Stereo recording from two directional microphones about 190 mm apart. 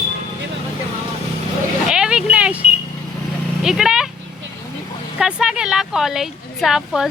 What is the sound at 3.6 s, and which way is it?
Speech, 5° right (ahead or behind).